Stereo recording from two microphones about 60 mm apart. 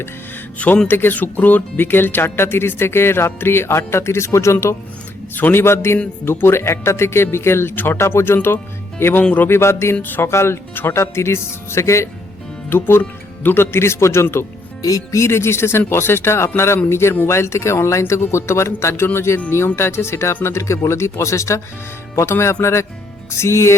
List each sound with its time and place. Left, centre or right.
0.9 s speech: left
5.3 s speech: left
9.9 s speech: left
12.7 s speech: left
14.8 s speech: left